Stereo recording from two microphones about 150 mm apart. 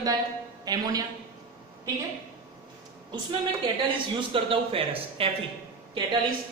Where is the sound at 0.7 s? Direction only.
25° right (ahead or behind).